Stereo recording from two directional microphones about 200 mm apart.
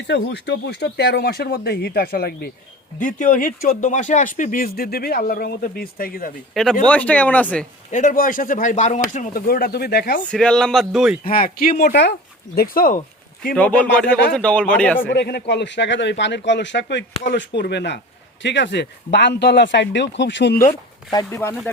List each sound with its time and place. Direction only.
0.0 s speech: 60° left (ahead or behind)
3.0 s speech: 40° left (ahead or behind)
6.5 s speech: centre (ahead or behind)
7.9 s speech: 40° left (ahead or behind)
10.2 s speech: 5° left (ahead or behind)
11.2 s speech: 45° left (ahead or behind)
11.8 s speech: 55° left (ahead or behind)
12.5 s speech: 45° left (ahead or behind)
13.5 s speech: 5° left (ahead or behind)
15.1 s speech: 55° left (ahead or behind)
21.1 s speech: 15° left (ahead or behind)